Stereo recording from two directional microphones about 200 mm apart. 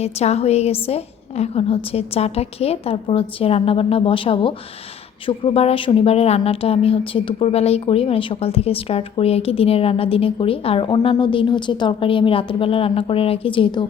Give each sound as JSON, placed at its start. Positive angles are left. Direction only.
{"t": 0.0, "sound": "speech", "side_deg": 30}